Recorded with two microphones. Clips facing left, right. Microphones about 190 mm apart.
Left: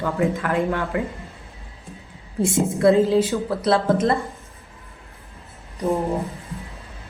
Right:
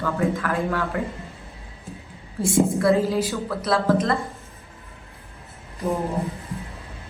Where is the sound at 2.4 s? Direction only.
20° left (ahead or behind).